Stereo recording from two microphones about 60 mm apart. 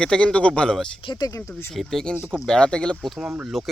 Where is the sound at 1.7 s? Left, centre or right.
Centre.